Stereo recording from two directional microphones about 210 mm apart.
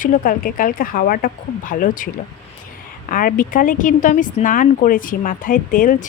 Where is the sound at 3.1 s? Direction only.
40° left (ahead or behind).